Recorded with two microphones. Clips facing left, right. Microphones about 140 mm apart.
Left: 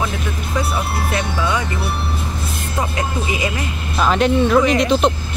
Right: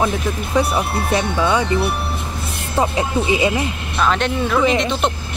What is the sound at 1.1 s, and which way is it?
Speech, 30° right (ahead or behind).